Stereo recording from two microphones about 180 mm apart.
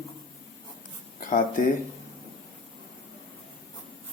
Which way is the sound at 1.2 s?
50° left (ahead or behind).